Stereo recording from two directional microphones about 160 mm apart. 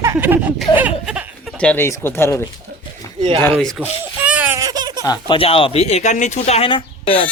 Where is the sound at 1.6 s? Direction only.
10° left (ahead or behind).